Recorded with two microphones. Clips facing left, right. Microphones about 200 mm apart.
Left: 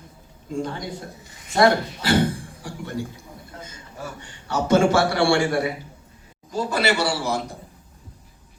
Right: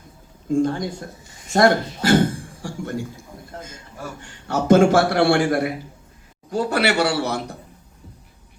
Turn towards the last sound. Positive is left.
turn(degrees=-65)  # may be behind; listen again after turning